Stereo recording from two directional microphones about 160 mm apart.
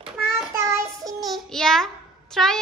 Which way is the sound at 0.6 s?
15° right (ahead or behind).